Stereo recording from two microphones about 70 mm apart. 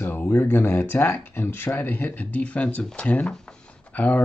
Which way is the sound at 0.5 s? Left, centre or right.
Left.